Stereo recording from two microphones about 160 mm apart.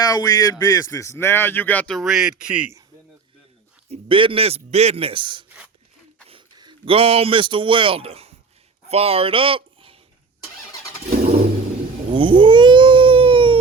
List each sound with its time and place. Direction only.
0.0 s a man's voice: 25° left (ahead or behind); by 2.6 s 5° right (ahead or behind)
3.8 s speech: 35° right (ahead or behind)
12.1 s baby cry: 30° right (ahead or behind)